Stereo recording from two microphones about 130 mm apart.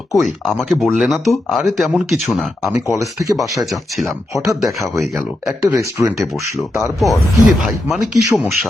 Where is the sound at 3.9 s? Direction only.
Centre (ahead or behind).